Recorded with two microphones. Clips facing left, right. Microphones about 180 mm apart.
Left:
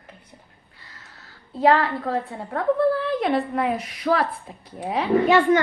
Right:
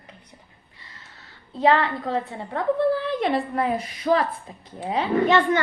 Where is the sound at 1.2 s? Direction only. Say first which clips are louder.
Left 1 dB; centre (ahead or behind).